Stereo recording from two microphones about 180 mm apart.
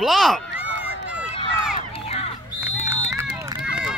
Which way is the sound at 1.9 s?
35° left (ahead or behind).